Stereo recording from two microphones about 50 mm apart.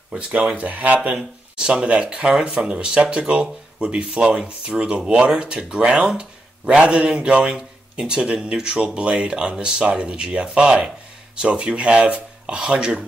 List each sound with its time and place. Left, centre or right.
0.6 s speech: right
1.1 s speech: centre